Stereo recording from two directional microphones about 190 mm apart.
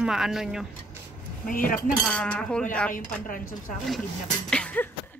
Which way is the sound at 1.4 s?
45° left (ahead or behind).